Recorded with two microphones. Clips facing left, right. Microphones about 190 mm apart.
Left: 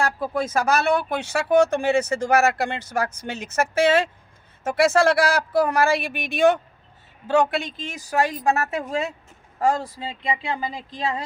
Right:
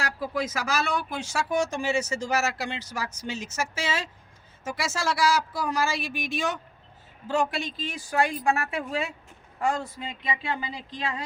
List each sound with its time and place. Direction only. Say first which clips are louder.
0.0 s a woman's voice: left 5 dB; 50° left (ahead or behind); by 10.4 s 30° left (ahead or behind)
10.6 s speech: left 5 dB; 45° left (ahead or behind)